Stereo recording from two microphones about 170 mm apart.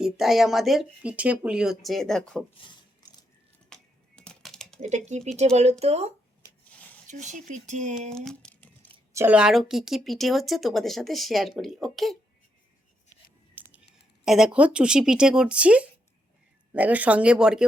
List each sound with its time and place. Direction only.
0.0 s speech: centre (ahead or behind)
2.6 s a sound: 25° left (ahead or behind)
3.7 s typing: 5° left (ahead or behind)
4.8 s speech: 45° right (ahead or behind)
6.7 s a sound: 10° left (ahead or behind)
7.1 s speech: 45° right (ahead or behind)
8.1 s crumpling: 5° left (ahead or behind)
9.1 s speech: 10° right (ahead or behind)
13.6 s a sound: 10° right (ahead or behind)
14.3 s speech: 5° right (ahead or behind)